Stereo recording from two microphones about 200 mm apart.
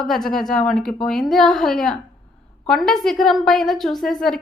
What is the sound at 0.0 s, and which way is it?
A woman's voice, centre (ahead or behind).